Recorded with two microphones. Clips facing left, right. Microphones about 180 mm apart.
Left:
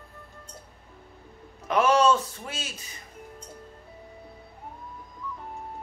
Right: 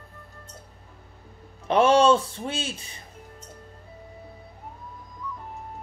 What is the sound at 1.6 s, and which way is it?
A man's voice, 30° right (ahead or behind).